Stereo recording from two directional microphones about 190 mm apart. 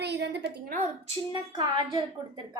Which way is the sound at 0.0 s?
60° right (ahead or behind).